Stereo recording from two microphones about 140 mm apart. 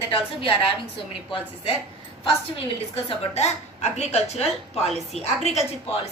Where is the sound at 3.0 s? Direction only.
50° left (ahead or behind).